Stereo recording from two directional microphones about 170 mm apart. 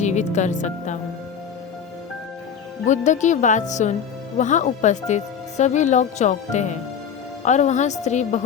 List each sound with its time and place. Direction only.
0.0 s speech: 45° left (ahead or behind)
2.8 s speech: 45° left (ahead or behind)